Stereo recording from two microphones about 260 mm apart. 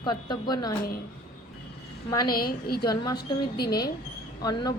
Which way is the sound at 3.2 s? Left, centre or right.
Left.